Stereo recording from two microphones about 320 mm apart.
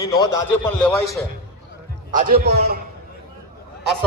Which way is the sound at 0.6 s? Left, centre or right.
Centre.